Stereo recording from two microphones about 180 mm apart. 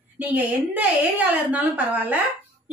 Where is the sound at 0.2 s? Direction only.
10° right (ahead or behind).